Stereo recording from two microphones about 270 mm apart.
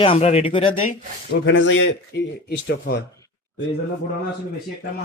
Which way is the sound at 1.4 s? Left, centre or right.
Left.